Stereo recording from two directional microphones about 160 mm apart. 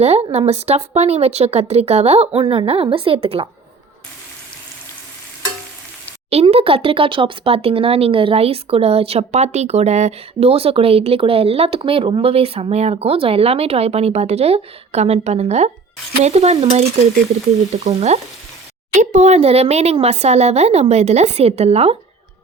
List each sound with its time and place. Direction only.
0.0 s speech: 40° right (ahead or behind)
6.3 s speech: 40° right (ahead or behind)